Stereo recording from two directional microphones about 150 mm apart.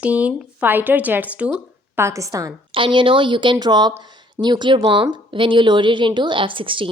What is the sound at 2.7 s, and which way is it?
A woman's voice, 35° right (ahead or behind).